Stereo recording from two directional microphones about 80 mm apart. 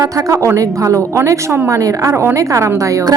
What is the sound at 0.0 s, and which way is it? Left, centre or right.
A woman's voice, right.